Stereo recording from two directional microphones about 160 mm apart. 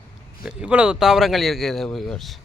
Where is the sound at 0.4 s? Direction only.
5° right (ahead or behind).